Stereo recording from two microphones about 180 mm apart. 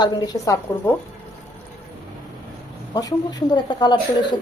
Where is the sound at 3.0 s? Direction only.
20° left (ahead or behind).